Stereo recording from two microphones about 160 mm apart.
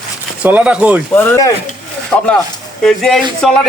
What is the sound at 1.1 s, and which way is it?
Speech, 10° left (ahead or behind).